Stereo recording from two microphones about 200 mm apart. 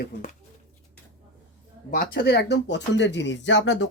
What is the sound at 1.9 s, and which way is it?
Speech, 50° left (ahead or behind).